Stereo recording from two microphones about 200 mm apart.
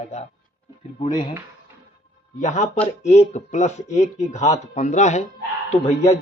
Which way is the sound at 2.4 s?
35° left (ahead or behind).